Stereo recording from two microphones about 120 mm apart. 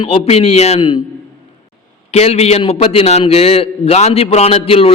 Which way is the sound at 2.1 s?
60° left (ahead or behind).